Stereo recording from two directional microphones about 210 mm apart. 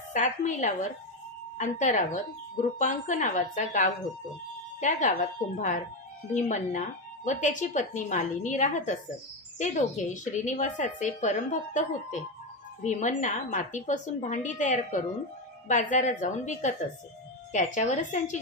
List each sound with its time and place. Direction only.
0.1 s a woman's voice: 35° left (ahead or behind)